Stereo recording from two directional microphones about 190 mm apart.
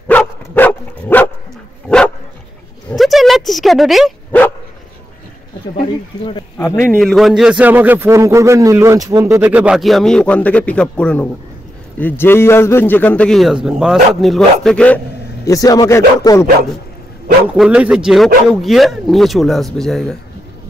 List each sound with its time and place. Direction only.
0.1 s dog: 10° left (ahead or behind)
6.6 s a man's voice: 10° left (ahead or behind)
7.0 s a man's voice: centre (ahead or behind)
15.4 s a man's voice: 20° left (ahead or behind)
17.6 s a man's voice: 5° right (ahead or behind)